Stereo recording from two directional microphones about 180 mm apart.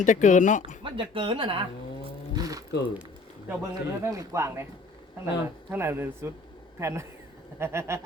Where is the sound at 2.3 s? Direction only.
20° right (ahead or behind).